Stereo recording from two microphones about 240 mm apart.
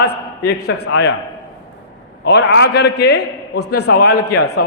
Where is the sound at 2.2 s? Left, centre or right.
Left.